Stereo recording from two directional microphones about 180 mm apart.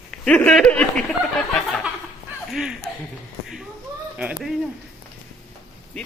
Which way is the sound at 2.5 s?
Centre (ahead or behind).